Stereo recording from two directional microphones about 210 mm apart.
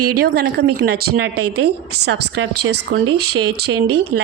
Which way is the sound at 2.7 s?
50° right (ahead or behind).